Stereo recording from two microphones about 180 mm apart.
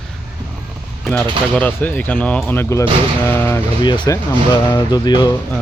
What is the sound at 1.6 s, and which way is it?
Speech, 10° left (ahead or behind).